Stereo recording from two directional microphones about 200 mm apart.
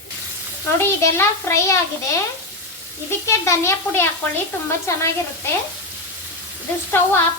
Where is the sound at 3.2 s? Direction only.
15° left (ahead or behind).